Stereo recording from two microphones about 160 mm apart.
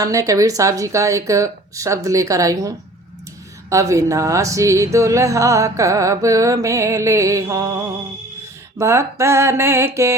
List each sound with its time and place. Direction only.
0.0 s music: 20° right (ahead or behind)
8.8 s mantra: 15° right (ahead or behind)